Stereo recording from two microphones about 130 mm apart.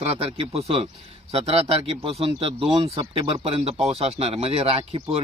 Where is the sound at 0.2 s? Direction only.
50° right (ahead or behind).